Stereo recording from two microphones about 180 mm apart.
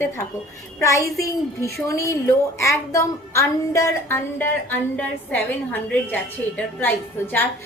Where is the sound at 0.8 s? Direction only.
15° left (ahead or behind).